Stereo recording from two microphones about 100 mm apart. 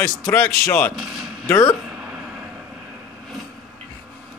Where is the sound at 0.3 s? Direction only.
15° left (ahead or behind).